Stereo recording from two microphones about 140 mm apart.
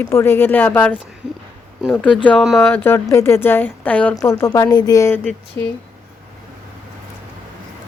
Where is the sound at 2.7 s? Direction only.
15° left (ahead or behind).